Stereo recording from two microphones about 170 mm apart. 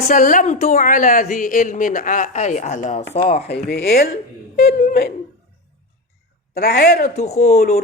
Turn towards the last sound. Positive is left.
turn(degrees=40)  # may be behind; listen again after turning